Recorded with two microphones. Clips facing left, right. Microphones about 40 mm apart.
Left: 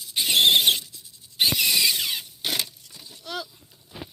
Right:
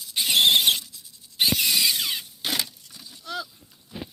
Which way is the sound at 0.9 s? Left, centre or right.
Left.